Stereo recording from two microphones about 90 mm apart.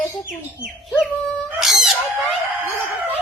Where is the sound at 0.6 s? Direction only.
15° right (ahead or behind).